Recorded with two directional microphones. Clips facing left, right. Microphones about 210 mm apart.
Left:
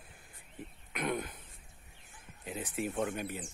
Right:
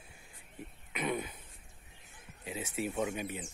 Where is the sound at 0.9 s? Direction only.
5° right (ahead or behind).